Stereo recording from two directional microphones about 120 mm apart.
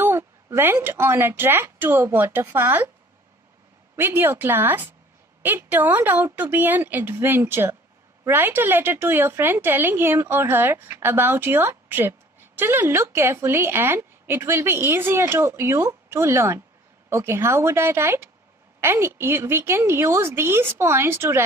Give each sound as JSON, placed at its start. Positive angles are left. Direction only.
{"t": 0.0, "sound": "a woman's voice", "side_deg": -20}
{"t": 3.9, "sound": "a woman's voice", "side_deg": -20}